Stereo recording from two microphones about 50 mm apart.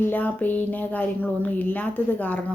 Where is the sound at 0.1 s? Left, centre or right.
Left.